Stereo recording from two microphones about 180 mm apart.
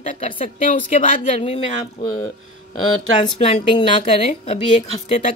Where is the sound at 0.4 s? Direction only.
45° left (ahead or behind).